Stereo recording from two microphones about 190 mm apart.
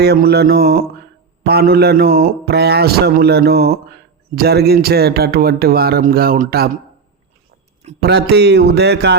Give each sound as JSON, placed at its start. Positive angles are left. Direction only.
{"t": 0.0, "sound": "speech", "side_deg": -55}
{"t": 8.0, "sound": "speech", "side_deg": -60}